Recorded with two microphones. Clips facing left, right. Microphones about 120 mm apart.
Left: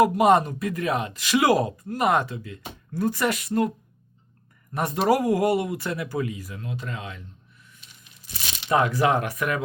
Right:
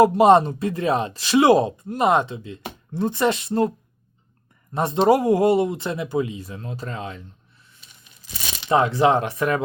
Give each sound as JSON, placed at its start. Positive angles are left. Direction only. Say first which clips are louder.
{"t": 0.0, "sound": "speech", "louder": "right 4 dB", "side_deg": -30}
{"t": 4.7, "sound": "speech", "louder": "right 4 dB", "side_deg": -25}
{"t": 8.7, "sound": "speech", "louder": "right 3 dB", "side_deg": -25}